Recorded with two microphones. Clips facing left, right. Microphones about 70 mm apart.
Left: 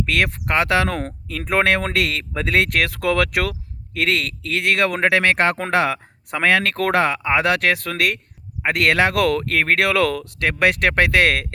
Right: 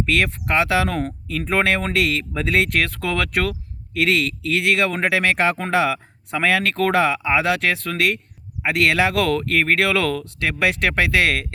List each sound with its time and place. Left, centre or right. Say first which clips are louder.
0.0 s speech: even; left
1.0 s speech: right 3 dB; left
1.5 s speech: left 2 dB; left
3.9 s speech: right 2 dB; left